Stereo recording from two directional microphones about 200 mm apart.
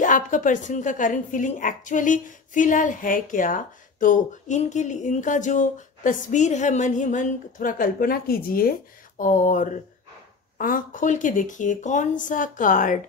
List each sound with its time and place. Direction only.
0.0 s a woman's voice: 40° left (ahead or behind)